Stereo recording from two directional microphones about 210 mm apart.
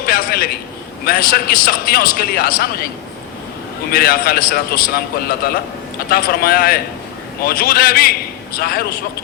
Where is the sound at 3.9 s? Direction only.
45° left (ahead or behind).